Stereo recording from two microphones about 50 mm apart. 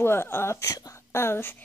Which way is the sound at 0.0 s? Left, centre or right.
Left.